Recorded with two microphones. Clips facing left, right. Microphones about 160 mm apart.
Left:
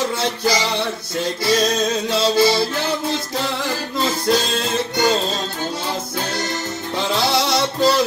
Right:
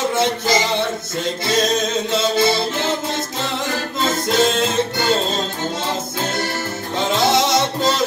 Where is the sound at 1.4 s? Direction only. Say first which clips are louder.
Left 1 dB; 20° right (ahead or behind).